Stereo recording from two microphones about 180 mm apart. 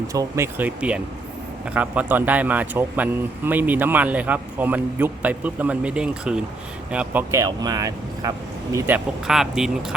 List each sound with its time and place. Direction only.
0.1 s a man's voice: 15° right (ahead or behind)